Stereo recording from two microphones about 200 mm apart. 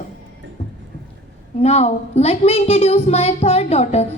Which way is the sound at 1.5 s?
30° left (ahead or behind).